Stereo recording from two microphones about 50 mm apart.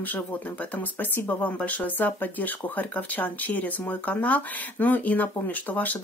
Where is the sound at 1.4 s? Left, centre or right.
Left.